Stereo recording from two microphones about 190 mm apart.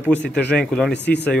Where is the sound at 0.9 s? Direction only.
65° left (ahead or behind).